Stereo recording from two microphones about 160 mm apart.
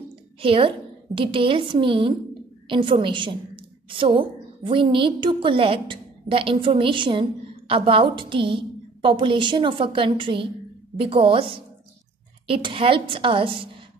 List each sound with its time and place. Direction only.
0.4 s a woman's voice: 35° right (ahead or behind)